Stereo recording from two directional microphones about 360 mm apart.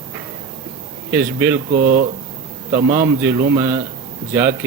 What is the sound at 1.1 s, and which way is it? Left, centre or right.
Speech, centre.